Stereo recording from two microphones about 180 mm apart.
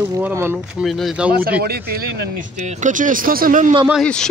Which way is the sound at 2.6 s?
45° right (ahead or behind).